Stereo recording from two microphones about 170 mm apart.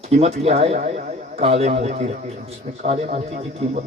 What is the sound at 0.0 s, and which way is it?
A man's voice, 40° right (ahead or behind).